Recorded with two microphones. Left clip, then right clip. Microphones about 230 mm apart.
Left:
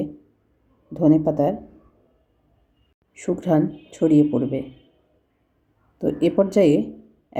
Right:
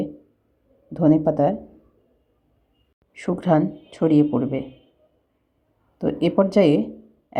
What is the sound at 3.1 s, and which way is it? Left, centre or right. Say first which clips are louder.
Speech: right 1 dB; centre.